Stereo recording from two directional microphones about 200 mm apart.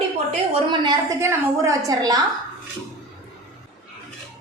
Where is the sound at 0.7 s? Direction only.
20° right (ahead or behind).